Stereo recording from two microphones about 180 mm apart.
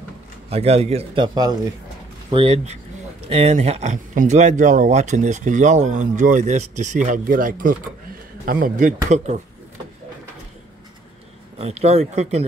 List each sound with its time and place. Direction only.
0.5 s speech: 35° right (ahead or behind)
2.3 s speech: 30° right (ahead or behind)
11.5 s speech: 35° right (ahead or behind)